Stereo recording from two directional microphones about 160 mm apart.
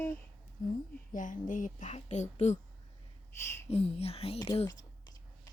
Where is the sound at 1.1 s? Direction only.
55° left (ahead or behind).